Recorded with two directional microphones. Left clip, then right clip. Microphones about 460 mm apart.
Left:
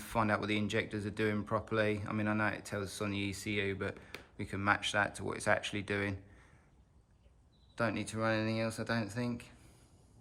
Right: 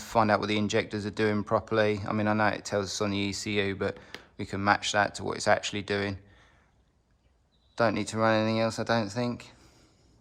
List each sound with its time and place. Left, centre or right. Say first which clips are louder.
0.0 s speech: right 9 dB; centre
7.8 s speech: right 9 dB; centre